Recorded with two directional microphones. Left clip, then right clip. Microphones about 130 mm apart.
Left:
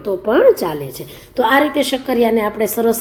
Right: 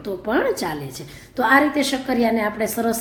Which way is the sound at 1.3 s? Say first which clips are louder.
Left 3 dB; 20° left (ahead or behind).